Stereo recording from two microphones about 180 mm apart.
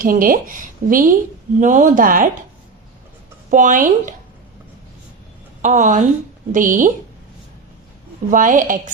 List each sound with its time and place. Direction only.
0.0 s speech: 50° right (ahead or behind)
3.5 s speech: 45° right (ahead or behind)
5.6 s speech: 40° right (ahead or behind)
8.3 s speech: 45° right (ahead or behind)